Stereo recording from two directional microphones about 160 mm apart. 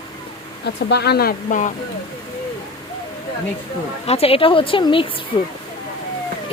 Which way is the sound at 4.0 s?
40° left (ahead or behind).